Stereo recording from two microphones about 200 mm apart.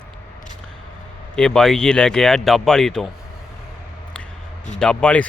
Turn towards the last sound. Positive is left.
turn(degrees=5)  # may be behind; listen again after turning